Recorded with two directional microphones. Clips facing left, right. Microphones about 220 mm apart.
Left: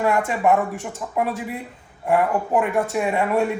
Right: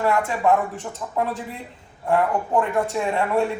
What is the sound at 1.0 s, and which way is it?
A man's voice, 5° left (ahead or behind).